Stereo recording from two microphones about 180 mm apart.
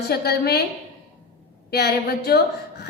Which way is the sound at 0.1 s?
60° left (ahead or behind).